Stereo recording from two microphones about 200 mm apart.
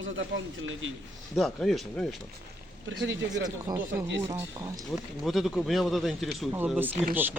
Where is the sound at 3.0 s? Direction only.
65° right (ahead or behind).